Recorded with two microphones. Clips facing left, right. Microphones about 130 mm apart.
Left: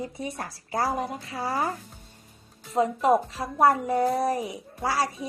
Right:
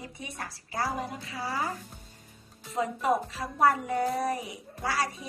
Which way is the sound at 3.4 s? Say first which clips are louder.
Left 3 dB; 35° left (ahead or behind).